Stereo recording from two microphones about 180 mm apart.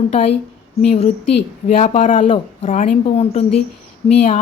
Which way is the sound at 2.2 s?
30° left (ahead or behind).